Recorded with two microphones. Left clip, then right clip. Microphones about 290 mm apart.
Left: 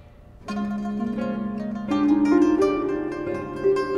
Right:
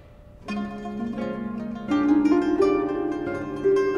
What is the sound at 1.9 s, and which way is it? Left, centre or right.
Music, left.